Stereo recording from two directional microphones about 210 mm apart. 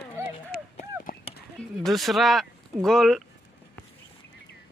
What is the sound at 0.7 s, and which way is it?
Clip-clop, 35° left (ahead or behind).